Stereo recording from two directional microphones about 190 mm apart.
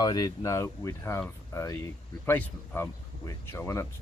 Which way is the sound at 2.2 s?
10° left (ahead or behind).